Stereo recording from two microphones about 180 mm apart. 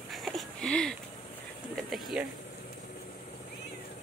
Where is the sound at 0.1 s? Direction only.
Centre (ahead or behind).